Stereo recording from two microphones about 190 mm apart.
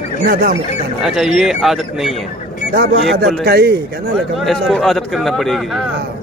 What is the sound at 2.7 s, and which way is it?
Speech, 60° right (ahead or behind).